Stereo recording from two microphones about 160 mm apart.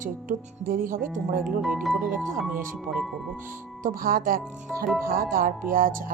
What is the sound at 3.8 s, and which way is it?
Speech, 65° right (ahead or behind).